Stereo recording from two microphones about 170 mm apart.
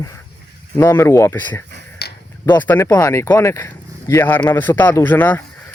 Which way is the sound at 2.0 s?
75° left (ahead or behind).